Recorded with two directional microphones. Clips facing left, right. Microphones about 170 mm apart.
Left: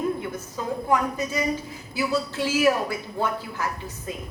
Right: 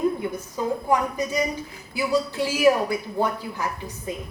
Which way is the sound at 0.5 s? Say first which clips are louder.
Right 1 dB; 15° right (ahead or behind).